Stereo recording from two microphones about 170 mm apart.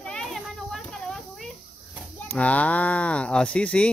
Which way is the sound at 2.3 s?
10° left (ahead or behind).